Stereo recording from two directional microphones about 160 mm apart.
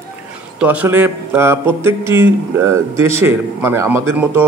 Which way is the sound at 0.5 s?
10° right (ahead or behind).